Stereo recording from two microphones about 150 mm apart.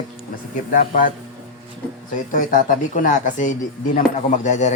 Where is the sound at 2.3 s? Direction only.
65° left (ahead or behind).